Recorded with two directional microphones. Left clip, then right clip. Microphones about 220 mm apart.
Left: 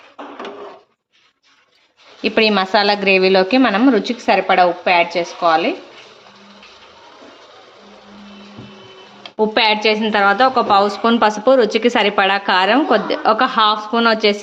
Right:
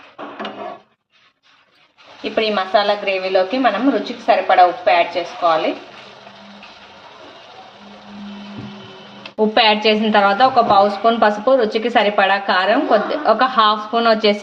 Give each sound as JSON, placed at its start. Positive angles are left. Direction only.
{"t": 2.2, "sound": "a woman's voice", "side_deg": 50}
{"t": 9.6, "sound": "a woman's voice", "side_deg": 15}